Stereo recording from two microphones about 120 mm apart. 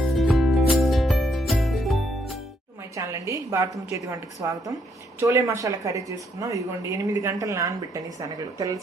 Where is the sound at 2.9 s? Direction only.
25° right (ahead or behind).